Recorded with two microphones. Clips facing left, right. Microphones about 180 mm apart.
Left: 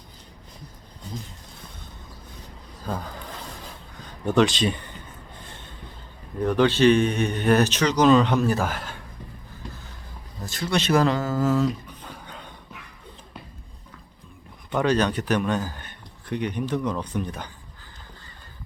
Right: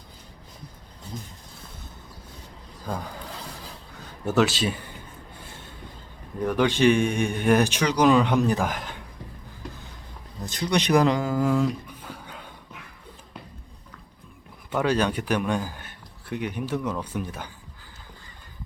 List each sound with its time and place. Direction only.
2.8 s a man's voice: 10° right (ahead or behind)
5.5 s a sound: 10° right (ahead or behind)
6.4 s a man's voice: 10° right (ahead or behind)
10.4 s speech: 20° right (ahead or behind)
14.7 s a man's voice: 5° right (ahead or behind)